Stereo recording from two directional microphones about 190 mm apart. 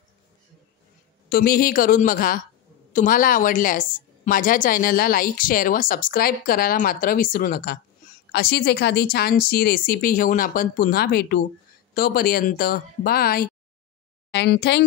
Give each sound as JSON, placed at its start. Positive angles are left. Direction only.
{"t": 1.3, "sound": "a woman's voice", "side_deg": 50}
{"t": 14.3, "sound": "a woman's voice", "side_deg": 65}